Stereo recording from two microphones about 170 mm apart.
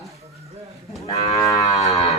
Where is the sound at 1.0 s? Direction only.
35° left (ahead or behind).